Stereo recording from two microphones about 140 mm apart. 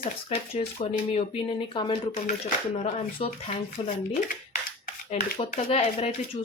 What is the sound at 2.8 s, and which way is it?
A woman's voice, 45° left (ahead or behind).